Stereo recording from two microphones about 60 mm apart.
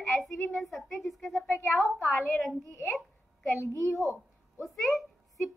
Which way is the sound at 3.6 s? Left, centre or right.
Left.